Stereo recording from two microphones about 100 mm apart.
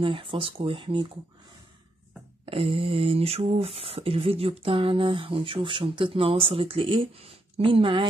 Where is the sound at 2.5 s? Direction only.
70° right (ahead or behind).